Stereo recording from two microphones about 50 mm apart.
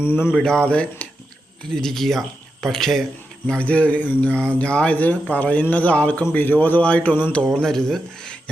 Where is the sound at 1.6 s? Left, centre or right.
Centre.